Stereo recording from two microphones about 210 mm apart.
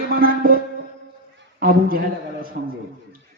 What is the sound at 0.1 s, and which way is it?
Music, 45° right (ahead or behind).